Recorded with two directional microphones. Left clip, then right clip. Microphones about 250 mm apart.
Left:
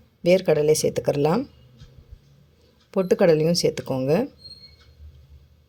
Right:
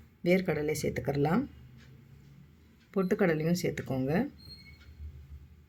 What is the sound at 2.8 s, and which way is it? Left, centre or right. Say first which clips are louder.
Speech: left 11 dB; left.